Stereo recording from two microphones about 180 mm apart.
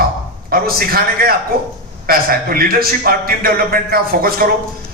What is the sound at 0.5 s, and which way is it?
A man's voice, 55° right (ahead or behind).